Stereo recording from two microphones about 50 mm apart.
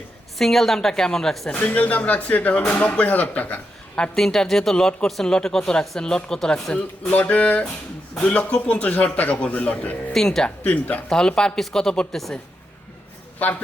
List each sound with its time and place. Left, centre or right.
0.3 s speech: centre
1.5 s speech: left
4.1 s speech: centre
7.1 s speech: left
10.1 s speech: centre
10.6 s speech: left
11.1 s speech: centre